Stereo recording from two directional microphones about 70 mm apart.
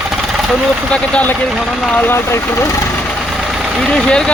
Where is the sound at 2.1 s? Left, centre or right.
Left.